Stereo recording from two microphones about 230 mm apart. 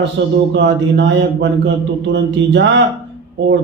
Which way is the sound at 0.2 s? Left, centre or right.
Right.